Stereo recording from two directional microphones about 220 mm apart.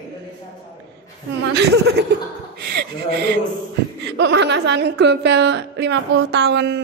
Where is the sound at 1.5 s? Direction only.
50° right (ahead or behind).